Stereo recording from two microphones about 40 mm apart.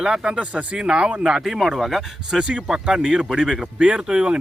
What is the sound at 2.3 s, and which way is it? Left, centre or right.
Speech, right.